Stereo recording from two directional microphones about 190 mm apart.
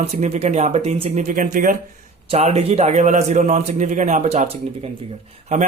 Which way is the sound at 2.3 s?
35° right (ahead or behind).